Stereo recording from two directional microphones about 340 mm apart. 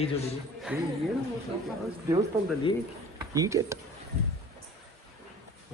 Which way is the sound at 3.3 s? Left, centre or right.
Centre.